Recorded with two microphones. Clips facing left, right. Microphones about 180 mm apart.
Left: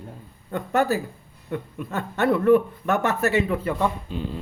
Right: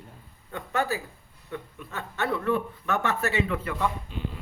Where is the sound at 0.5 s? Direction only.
45° left (ahead or behind).